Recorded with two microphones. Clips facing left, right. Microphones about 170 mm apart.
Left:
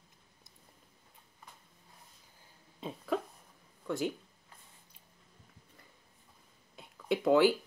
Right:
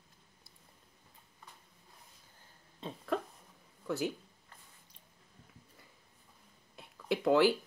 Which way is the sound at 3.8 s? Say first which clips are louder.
Left 1 dB; centre (ahead or behind).